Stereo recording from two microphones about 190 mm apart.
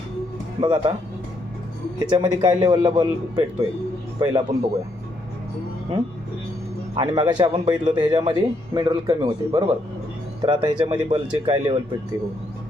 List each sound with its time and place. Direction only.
0.6 s speech: 25° right (ahead or behind)
2.0 s speech: 25° right (ahead or behind)
6.9 s speech: 25° right (ahead or behind)